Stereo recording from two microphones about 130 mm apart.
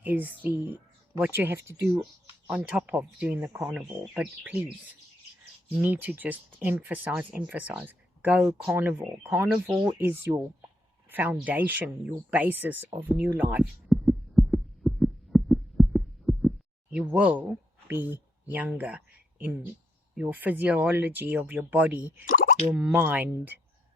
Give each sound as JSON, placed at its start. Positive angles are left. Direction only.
{"t": 0.0, "sound": "speech", "side_deg": -15}
{"t": 2.5, "sound": "speech", "side_deg": -10}
{"t": 5.8, "sound": "speech", "side_deg": -15}
{"t": 13.9, "sound": "heart sounds", "side_deg": 0}
{"t": 16.9, "sound": "speech", "side_deg": -10}